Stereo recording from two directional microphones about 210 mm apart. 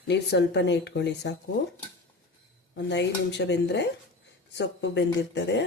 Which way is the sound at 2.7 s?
55° left (ahead or behind).